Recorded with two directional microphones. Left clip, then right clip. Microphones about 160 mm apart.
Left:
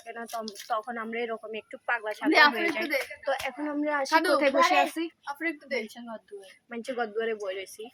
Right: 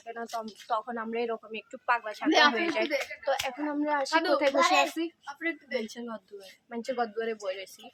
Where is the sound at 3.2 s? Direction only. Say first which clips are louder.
Even; 5° left (ahead or behind).